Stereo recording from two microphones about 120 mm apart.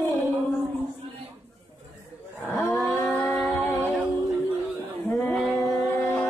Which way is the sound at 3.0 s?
15° left (ahead or behind).